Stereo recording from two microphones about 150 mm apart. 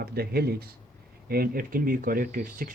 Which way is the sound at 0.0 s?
90° right.